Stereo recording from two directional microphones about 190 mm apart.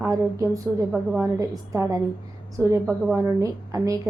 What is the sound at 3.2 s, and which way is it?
Speech, 15° right (ahead or behind).